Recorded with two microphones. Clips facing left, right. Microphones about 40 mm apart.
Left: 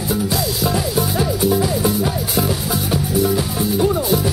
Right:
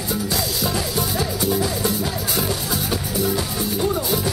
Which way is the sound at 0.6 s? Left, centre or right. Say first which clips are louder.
Left 4 dB; centre.